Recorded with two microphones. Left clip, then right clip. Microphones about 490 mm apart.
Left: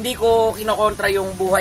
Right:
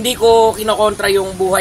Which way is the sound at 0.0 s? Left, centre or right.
Left.